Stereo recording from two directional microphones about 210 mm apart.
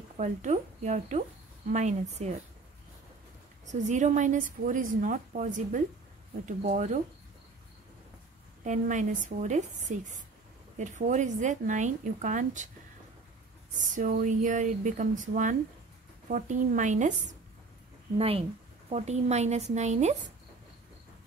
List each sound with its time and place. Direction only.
0.2 s a woman's voice: 35° right (ahead or behind)
3.6 s a woman's voice: 35° right (ahead or behind)
8.6 s a woman's voice: 35° right (ahead or behind)
13.7 s a woman's voice: 40° right (ahead or behind)